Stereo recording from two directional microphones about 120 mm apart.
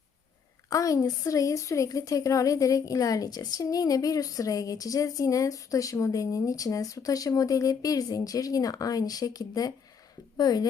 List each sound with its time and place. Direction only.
0.7 s a woman's voice: 30° left (ahead or behind)